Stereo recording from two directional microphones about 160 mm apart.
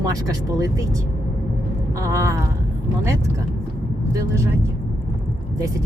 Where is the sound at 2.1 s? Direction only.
15° right (ahead or behind).